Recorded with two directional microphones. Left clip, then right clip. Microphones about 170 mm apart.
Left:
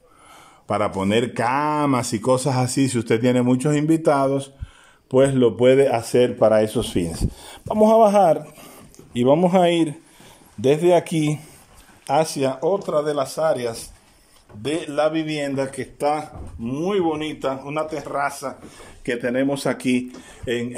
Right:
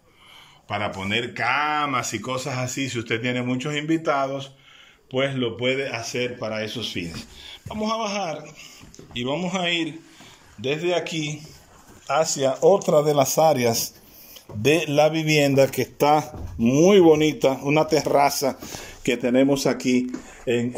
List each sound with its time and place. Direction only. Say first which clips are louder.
0.7 s speech: left 5 dB; 35° left (ahead or behind)
12.5 s a man's voice: right 6 dB; 10° right (ahead or behind)